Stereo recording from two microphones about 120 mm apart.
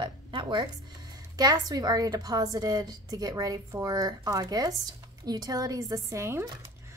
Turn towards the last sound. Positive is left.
turn(degrees=-25)  # may be behind; listen again after turning